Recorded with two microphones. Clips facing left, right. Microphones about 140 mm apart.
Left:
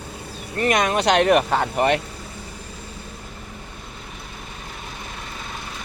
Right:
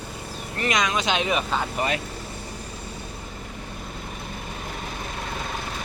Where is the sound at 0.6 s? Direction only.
50° left (ahead or behind).